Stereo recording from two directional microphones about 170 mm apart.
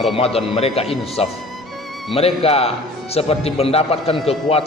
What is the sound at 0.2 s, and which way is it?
Speech, 35° left (ahead or behind).